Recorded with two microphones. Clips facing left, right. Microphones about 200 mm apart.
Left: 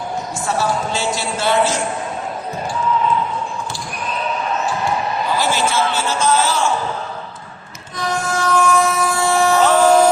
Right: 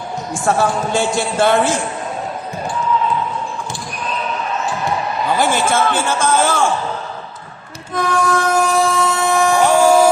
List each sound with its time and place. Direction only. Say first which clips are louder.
0.4 s a man's voice: right 4 dB; 55° right (ahead or behind)
5.4 s a man's voice: right 3 dB; 50° right (ahead or behind)
7.9 s train: right 5 dB; 55° right (ahead or behind)
8.6 s train: right 1 dB; 35° right (ahead or behind); by 10.1 s 10° right (ahead or behind)